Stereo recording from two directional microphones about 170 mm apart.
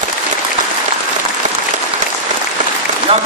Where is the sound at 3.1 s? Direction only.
35° right (ahead or behind).